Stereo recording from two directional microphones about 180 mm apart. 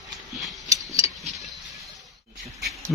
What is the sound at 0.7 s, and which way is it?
Scissors, 15° right (ahead or behind).